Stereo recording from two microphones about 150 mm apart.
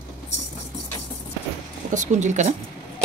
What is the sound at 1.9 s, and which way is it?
Speech, 55° right (ahead or behind).